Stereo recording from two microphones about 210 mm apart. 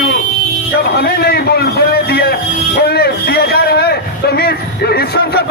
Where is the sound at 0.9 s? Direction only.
50° left (ahead or behind).